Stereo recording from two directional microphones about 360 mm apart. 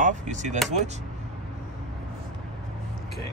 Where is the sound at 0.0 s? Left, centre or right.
Right.